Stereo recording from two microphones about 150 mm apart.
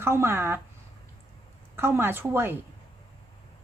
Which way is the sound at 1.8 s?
15° right (ahead or behind).